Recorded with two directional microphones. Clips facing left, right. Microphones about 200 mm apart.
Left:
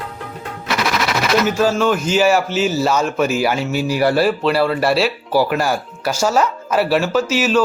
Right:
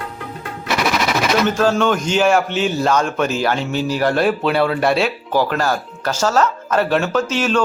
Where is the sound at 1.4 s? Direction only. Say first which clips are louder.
Even; 5° left (ahead or behind).